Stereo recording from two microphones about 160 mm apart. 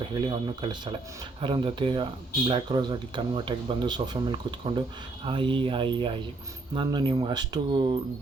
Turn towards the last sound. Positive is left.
turn(degrees=-30)  # may be behind; listen again after turning